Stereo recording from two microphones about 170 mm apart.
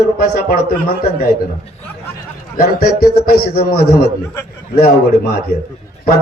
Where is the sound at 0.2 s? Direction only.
55° left (ahead or behind).